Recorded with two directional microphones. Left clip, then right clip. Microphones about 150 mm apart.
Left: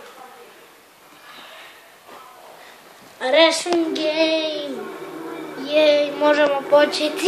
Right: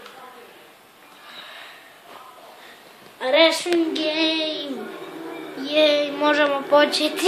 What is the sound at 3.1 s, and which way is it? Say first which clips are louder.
Speech: left 1 dB; 10° left (ahead or behind).